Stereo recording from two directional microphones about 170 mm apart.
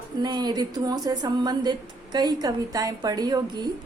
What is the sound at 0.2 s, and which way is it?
A woman's voice, 25° right (ahead or behind).